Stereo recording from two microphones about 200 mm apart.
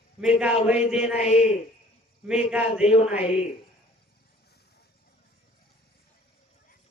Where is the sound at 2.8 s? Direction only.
30° left (ahead or behind).